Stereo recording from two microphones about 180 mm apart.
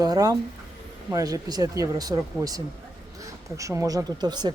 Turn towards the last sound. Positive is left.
turn(degrees=-25)  # may be behind; listen again after turning